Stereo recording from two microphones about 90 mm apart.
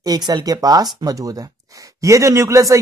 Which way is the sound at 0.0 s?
45° right (ahead or behind).